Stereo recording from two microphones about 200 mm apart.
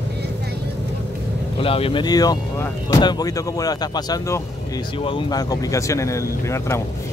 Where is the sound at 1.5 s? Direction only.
30° left (ahead or behind).